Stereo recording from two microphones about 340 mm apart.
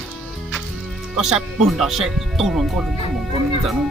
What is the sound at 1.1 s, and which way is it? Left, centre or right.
Speech, centre.